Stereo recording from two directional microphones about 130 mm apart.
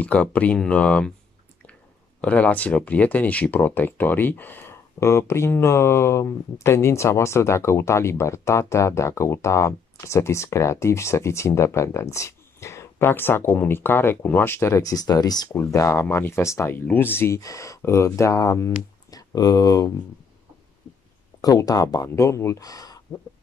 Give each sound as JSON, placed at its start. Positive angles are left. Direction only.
{"t": 0.0, "sound": "speech", "side_deg": 10}
{"t": 2.2, "sound": "speech", "side_deg": 10}
{"t": 21.4, "sound": "speech", "side_deg": 30}